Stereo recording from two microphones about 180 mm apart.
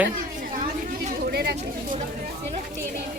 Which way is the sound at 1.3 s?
60° right (ahead or behind).